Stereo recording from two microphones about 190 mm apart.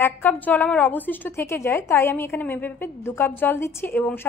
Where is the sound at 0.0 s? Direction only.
10° left (ahead or behind).